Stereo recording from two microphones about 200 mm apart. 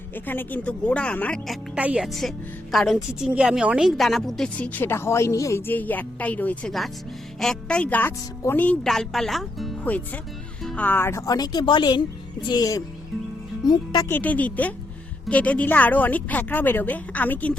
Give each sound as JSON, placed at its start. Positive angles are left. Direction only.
{"t": 0.3, "sound": "a woman's voice", "side_deg": 10}
{"t": 1.7, "sound": "a woman's voice", "side_deg": -5}